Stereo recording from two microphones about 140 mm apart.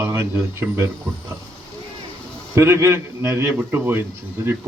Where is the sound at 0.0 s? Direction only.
20° right (ahead or behind).